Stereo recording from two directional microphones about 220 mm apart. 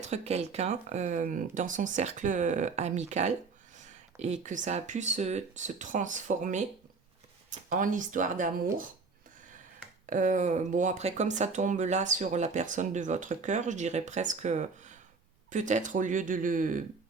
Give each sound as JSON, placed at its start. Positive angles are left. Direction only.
{"t": 0.0, "sound": "speech", "side_deg": -30}
{"t": 7.7, "sound": "speech", "side_deg": -35}
{"t": 10.1, "sound": "speech", "side_deg": -35}